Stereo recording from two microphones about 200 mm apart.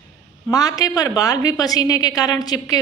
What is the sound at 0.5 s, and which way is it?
A woman's voice, 20° left (ahead or behind).